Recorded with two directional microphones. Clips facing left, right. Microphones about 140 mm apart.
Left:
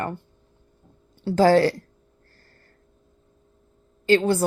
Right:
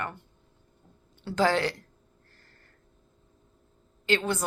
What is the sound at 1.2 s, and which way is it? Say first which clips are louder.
Speech: left 8 dB; 35° left (ahead or behind).